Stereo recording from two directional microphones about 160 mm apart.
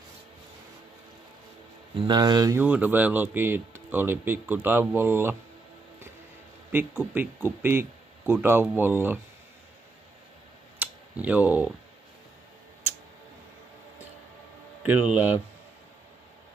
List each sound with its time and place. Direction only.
2.0 s speech: 25° right (ahead or behind)
2.5 s speech: 10° right (ahead or behind)
6.7 s speech: 15° right (ahead or behind)
10.8 s a sound: 10° right (ahead or behind)
14.9 s speech: 10° right (ahead or behind)